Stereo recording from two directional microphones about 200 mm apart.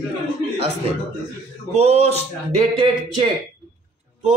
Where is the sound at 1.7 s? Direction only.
30° right (ahead or behind).